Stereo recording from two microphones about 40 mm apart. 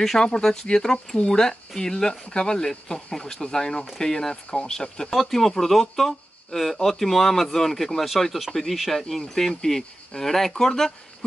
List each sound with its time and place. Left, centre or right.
0.2 s speech: centre
5.1 s speech: centre